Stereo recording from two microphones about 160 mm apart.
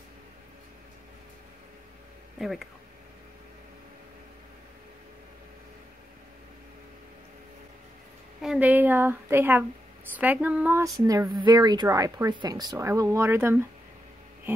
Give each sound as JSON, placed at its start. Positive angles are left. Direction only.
{"t": 2.3, "sound": "speech", "side_deg": 0}
{"t": 8.4, "sound": "a woman's voice", "side_deg": -5}
{"t": 11.0, "sound": "speech", "side_deg": -25}